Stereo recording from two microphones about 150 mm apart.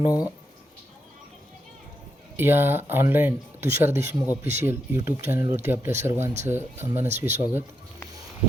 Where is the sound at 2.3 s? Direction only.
15° right (ahead or behind).